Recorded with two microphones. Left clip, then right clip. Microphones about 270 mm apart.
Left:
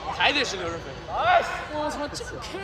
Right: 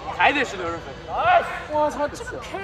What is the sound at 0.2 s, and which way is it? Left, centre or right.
A man's voice, right.